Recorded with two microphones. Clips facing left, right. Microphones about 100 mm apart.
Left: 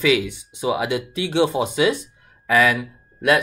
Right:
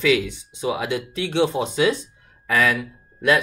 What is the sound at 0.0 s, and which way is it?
Speech, 5° left (ahead or behind).